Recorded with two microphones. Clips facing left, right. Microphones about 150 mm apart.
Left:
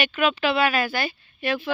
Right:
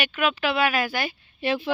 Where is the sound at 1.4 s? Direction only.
30° right (ahead or behind).